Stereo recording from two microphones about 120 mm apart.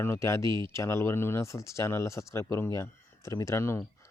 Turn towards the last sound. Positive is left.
turn(degrees=20)  # may be behind; listen again after turning